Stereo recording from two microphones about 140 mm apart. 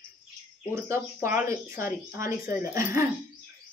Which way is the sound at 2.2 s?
80° left.